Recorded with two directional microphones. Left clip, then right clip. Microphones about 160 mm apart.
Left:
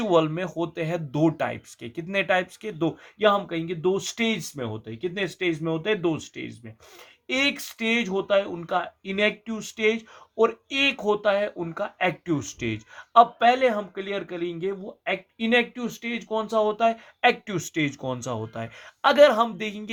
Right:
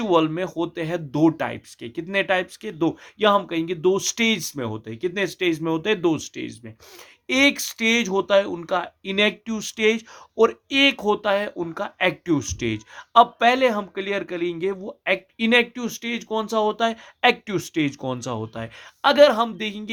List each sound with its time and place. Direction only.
0.0 s speech: 25° right (ahead or behind)
17.4 s speech: 20° right (ahead or behind)